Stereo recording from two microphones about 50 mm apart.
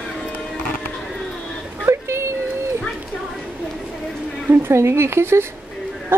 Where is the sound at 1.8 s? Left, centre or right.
Right.